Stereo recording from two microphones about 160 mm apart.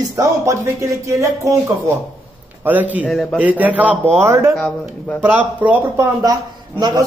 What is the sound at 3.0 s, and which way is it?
Speech, 5° left (ahead or behind).